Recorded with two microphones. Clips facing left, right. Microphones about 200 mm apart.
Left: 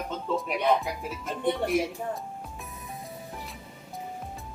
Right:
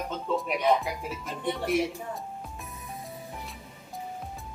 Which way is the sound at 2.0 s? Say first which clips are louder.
Left 4 dB; 50° left (ahead or behind).